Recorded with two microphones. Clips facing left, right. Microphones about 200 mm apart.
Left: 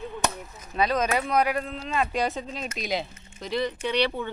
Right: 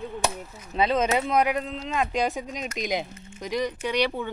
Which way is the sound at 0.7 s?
20° right (ahead or behind).